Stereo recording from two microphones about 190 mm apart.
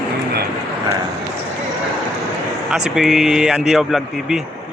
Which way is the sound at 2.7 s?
Centre (ahead or behind).